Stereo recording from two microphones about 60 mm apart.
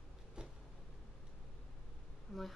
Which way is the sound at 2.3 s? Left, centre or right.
Centre.